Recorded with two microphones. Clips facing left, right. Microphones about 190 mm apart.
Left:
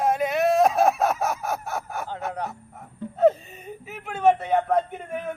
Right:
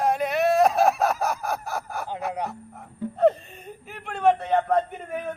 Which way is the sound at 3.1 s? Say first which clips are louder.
Left 1 dB; 5° left (ahead or behind).